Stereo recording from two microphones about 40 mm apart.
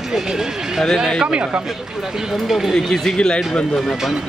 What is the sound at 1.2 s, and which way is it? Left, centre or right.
Speech, right.